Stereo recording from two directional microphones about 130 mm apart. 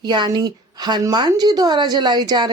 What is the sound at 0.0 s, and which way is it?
A woman's voice, 35° right (ahead or behind).